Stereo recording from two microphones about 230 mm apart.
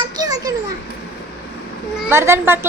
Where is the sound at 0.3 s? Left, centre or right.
Centre.